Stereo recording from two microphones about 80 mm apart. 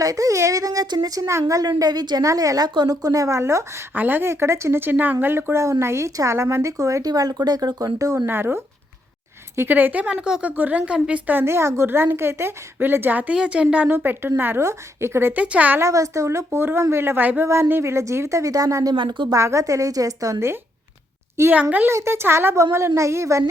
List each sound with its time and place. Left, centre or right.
0.0 s speech: right
1.6 s a woman's voice: right
2.2 s speech: right
3.9 s a woman's voice: right
7.9 s speech: right
8.3 s a woman's voice: right; by 11.2 s centre
11.3 s a woman's voice: right
13.9 s a woman's voice: right
15.3 s a woman's voice: centre
15.8 s a woman's voice: right
18.9 s a woman's voice: right
19.3 s speech: right
21.5 s a woman's voice: centre
21.8 s a woman's voice: right